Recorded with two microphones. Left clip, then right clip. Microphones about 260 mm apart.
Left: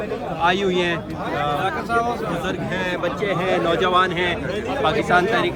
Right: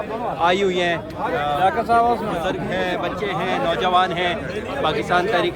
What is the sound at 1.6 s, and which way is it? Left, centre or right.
Speech, right.